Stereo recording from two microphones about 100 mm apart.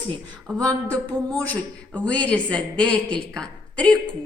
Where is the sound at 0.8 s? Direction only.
15° left (ahead or behind).